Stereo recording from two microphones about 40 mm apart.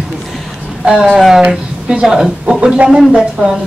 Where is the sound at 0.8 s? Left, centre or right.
Right.